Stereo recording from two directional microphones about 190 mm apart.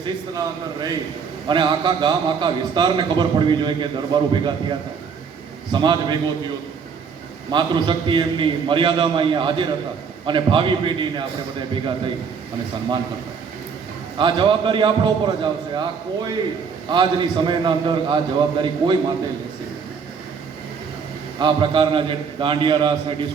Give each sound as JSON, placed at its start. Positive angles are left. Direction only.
{"t": 0.0, "sound": "a man's voice", "side_deg": -20}
{"t": 5.7, "sound": "a man's voice", "side_deg": -25}
{"t": 7.5, "sound": "a man's voice", "side_deg": -25}
{"t": 14.2, "sound": "a man's voice", "side_deg": -25}
{"t": 16.9, "sound": "a man's voice", "side_deg": -25}
{"t": 21.3, "sound": "a man's voice", "side_deg": -25}